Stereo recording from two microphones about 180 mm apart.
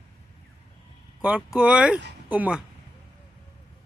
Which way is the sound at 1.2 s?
5° right (ahead or behind).